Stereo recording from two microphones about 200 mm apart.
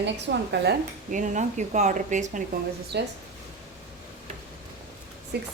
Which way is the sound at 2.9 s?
55° right (ahead or behind).